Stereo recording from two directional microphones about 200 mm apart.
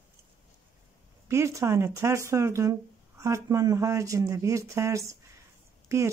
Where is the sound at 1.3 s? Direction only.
15° right (ahead or behind).